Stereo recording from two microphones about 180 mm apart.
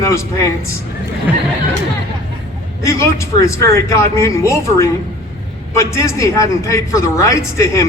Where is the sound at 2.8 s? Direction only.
15° left (ahead or behind).